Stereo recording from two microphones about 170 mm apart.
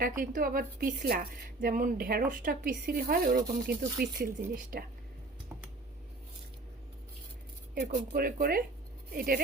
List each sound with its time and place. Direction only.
0.0 s speech: 55° right (ahead or behind)
7.8 s speech: 65° right (ahead or behind)